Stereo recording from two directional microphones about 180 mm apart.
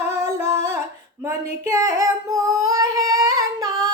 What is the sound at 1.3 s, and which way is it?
Female singing, 15° right (ahead or behind).